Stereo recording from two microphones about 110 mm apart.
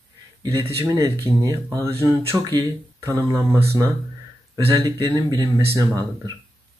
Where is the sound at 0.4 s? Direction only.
30° right (ahead or behind).